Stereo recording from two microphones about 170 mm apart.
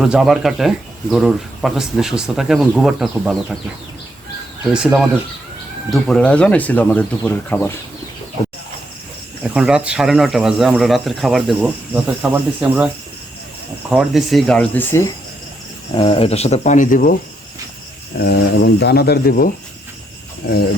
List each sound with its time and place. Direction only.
0.0 s speech: centre (ahead or behind)
4.7 s speech: 5° right (ahead or behind)
9.4 s speech: 5° right (ahead or behind)
13.9 s speech: 5° right (ahead or behind); by 15.1 s 15° left (ahead or behind)
16.0 s speech: 30° left (ahead or behind); by 17.2 s 55° left (ahead or behind)
18.2 s speech: 70° left (ahead or behind)
20.4 s jingle bell: 65° left (ahead or behind)